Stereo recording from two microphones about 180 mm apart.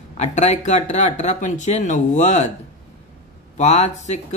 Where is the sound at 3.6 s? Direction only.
40° left (ahead or behind).